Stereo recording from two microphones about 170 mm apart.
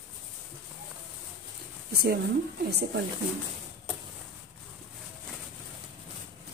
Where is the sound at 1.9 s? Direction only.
70° right (ahead or behind).